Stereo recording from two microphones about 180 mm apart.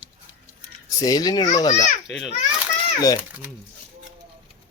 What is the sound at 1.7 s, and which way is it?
Speech, 40° left (ahead or behind).